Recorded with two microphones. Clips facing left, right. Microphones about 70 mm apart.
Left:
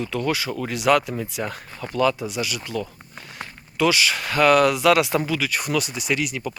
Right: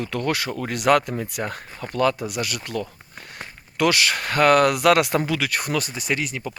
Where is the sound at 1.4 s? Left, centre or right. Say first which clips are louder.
Even; right.